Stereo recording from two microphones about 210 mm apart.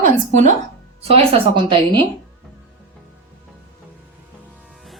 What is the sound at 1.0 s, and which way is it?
A woman's voice, 25° right (ahead or behind).